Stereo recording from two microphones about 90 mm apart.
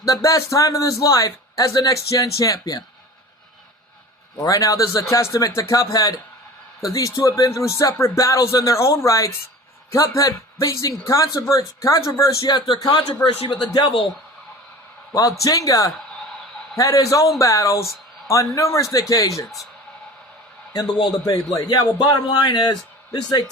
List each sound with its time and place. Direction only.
0.0 s a man's voice: 40° left (ahead or behind)
4.4 s a man's voice: 40° left (ahead or behind)
12.8 s speech: 55° left (ahead or behind)
15.1 s a man's voice: 40° left (ahead or behind)
20.7 s speech: 50° left (ahead or behind)